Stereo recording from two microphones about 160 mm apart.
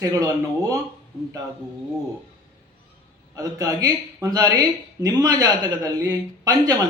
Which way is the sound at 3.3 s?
20° right (ahead or behind).